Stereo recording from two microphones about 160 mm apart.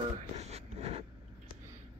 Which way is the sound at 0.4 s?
40° right (ahead or behind).